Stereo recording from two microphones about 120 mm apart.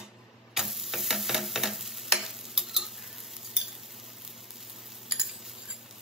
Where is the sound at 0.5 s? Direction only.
Centre (ahead or behind).